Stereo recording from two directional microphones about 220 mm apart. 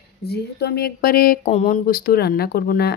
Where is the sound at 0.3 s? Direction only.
50° left (ahead or behind).